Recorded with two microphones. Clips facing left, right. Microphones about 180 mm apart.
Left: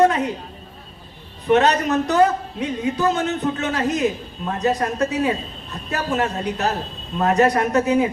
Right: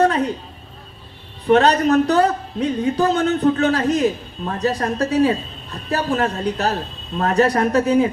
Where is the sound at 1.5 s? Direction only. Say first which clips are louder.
Right 3 dB; 35° right (ahead or behind).